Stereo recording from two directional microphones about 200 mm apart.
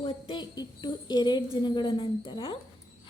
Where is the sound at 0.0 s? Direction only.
20° left (ahead or behind).